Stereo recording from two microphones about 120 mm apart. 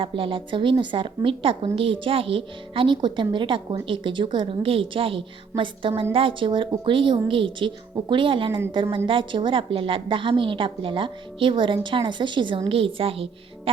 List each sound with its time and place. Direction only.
0.0 s speech: 45° right (ahead or behind)